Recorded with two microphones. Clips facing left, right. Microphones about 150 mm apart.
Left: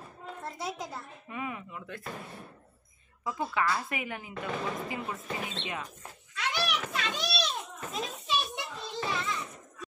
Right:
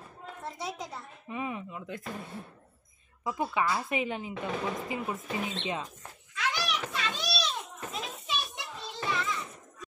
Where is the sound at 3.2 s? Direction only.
15° right (ahead or behind).